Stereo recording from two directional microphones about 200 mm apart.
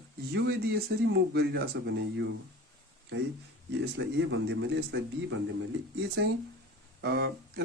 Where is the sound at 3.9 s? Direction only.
60° right (ahead or behind).